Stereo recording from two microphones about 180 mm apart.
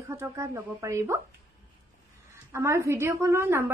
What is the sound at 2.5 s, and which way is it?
A woman's voice, 15° right (ahead or behind).